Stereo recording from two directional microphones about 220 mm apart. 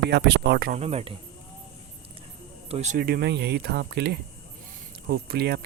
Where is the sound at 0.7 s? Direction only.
30° right (ahead or behind).